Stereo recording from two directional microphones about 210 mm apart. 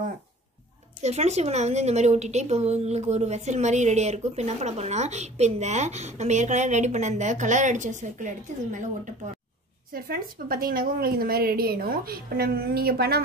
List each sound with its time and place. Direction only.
1.0 s a woman's voice: 30° right (ahead or behind); by 13.2 s 45° right (ahead or behind)